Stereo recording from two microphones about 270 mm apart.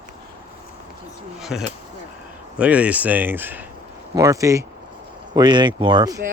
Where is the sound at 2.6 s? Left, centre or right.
Centre.